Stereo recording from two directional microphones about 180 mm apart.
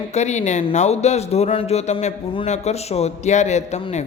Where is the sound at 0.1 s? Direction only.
40° left (ahead or behind).